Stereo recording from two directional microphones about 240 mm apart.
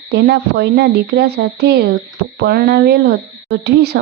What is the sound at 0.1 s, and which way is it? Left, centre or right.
Speech, right.